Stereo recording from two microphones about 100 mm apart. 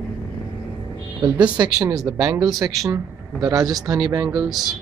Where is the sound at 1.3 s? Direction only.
10° right (ahead or behind).